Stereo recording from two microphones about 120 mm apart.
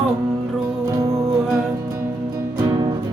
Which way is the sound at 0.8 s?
30° right (ahead or behind).